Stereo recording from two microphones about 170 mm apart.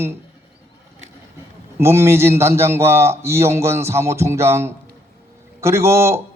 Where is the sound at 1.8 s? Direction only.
15° right (ahead or behind).